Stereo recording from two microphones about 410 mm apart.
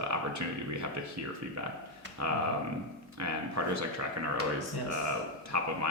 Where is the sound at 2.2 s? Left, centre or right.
Right.